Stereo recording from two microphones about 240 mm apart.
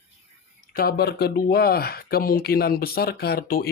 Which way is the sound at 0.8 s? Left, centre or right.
Left.